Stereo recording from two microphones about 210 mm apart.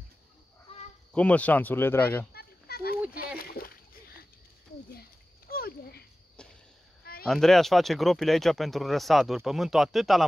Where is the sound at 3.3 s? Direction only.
45° left (ahead or behind).